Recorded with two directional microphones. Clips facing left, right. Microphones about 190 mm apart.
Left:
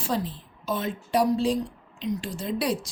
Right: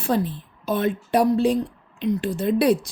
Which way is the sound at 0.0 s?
60° right (ahead or behind).